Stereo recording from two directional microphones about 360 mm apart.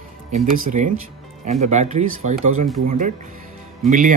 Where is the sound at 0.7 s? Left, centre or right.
Centre.